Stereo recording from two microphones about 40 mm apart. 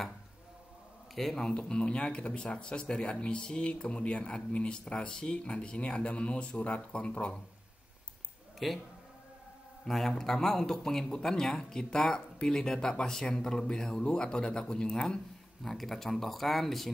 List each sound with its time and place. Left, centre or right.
1.1 s a man's voice: centre
1.4 s speech: left
8.6 s speech: centre
9.8 s speech: centre
15.6 s speech: centre